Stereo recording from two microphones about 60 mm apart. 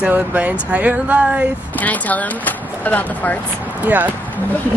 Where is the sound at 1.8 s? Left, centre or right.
Left.